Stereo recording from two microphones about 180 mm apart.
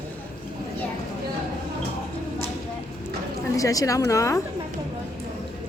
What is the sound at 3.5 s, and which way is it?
Speech, 20° left (ahead or behind).